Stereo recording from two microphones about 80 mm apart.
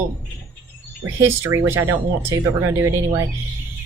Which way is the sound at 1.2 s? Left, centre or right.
Right.